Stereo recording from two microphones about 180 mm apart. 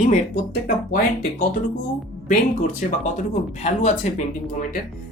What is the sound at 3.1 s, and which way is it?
Speech, 40° left (ahead or behind).